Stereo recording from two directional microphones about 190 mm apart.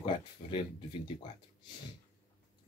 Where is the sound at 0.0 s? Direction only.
30° left (ahead or behind).